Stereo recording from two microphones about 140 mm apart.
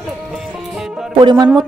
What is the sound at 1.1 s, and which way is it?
Speech, 30° right (ahead or behind).